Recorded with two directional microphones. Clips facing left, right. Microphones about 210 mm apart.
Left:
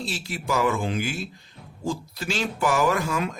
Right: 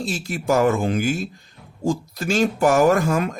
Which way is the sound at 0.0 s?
45° right (ahead or behind).